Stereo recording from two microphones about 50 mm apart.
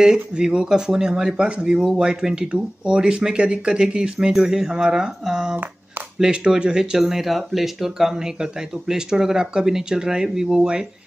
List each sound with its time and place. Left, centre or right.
0.0 s speech: centre